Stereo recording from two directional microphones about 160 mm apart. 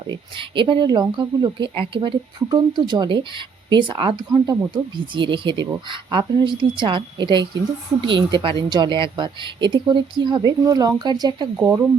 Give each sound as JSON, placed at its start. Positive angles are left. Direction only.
{"t": 0.1, "sound": "speech", "side_deg": -30}